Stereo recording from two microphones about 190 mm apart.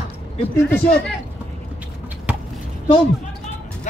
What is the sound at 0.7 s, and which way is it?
Speech, 5° left (ahead or behind).